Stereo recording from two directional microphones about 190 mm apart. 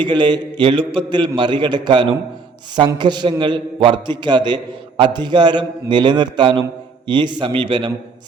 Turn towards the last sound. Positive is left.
turn(degrees=-30)  # may be behind; listen again after turning